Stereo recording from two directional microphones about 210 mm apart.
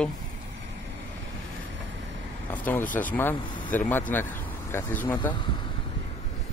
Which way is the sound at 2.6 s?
10° left (ahead or behind).